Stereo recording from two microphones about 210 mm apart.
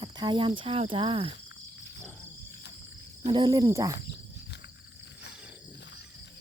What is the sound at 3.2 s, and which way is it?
Speech, 20° right (ahead or behind).